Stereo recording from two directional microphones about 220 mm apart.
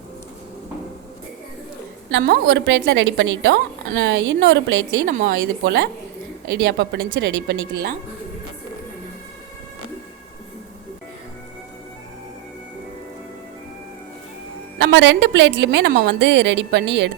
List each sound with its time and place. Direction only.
2.0 s a woman's voice: 50° right (ahead or behind)
5.1 s a woman's voice: 40° right (ahead or behind)
14.8 s a woman's voice: 55° right (ahead or behind)